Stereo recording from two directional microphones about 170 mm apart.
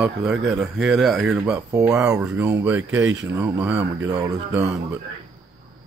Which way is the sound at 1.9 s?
15° right (ahead or behind).